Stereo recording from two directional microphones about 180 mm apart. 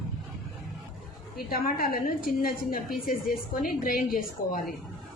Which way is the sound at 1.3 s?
55° left (ahead or behind).